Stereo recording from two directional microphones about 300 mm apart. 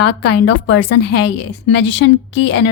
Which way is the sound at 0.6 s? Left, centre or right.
Left.